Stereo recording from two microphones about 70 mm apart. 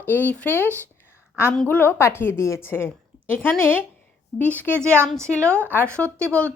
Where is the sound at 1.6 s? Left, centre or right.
Left.